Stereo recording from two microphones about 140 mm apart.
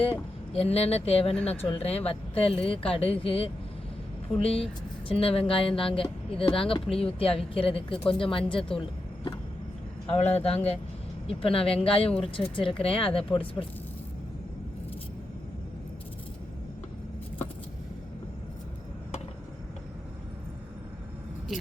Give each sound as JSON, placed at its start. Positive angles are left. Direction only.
{"t": 0.5, "sound": "a woman's voice", "side_deg": 45}
{"t": 10.3, "sound": "a woman's voice", "side_deg": 45}
{"t": 21.5, "sound": "a sound", "side_deg": 0}